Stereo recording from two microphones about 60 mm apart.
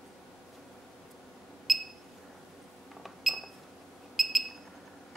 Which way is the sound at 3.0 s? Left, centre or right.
Centre.